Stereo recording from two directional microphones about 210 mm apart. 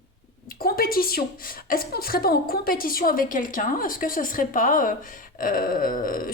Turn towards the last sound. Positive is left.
turn(degrees=40)  # may be behind; listen again after turning